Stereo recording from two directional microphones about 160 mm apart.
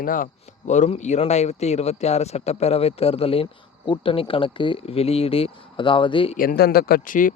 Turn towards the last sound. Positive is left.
turn(degrees=60)  # may be behind; listen again after turning